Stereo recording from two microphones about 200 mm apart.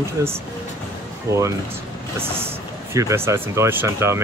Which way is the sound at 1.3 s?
15° right (ahead or behind).